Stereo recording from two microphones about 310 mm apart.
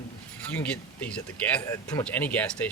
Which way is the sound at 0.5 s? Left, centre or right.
Centre.